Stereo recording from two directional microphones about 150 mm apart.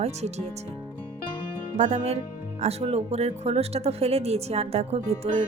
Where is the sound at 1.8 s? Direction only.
45° right (ahead or behind).